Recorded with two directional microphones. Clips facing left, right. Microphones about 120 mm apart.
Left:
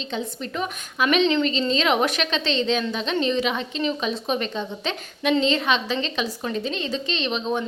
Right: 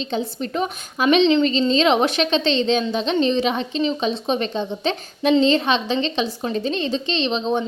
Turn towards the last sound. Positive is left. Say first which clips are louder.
# right 4 dB
turn(degrees=-30)  # may be behind; listen again after turning